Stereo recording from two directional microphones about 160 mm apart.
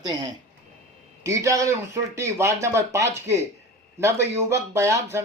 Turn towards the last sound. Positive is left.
turn(degrees=-15)  # may be behind; listen again after turning